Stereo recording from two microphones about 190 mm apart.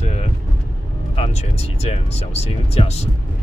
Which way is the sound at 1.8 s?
30° left (ahead or behind).